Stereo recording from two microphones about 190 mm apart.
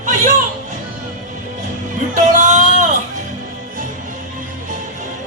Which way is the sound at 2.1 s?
40° right (ahead or behind).